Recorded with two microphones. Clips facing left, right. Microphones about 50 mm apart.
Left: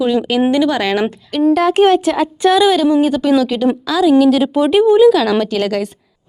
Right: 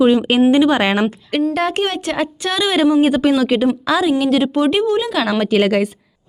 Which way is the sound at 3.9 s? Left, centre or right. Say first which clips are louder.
Left 7 dB; centre.